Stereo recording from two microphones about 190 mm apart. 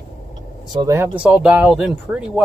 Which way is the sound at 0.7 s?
15° right (ahead or behind).